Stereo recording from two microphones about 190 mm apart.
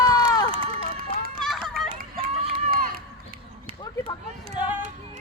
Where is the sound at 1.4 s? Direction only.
Centre (ahead or behind).